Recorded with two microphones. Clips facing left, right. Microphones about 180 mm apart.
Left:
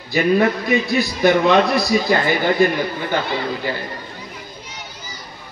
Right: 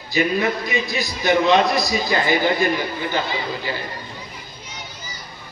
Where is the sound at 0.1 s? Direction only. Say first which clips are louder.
Left 4 dB; 55° left (ahead or behind).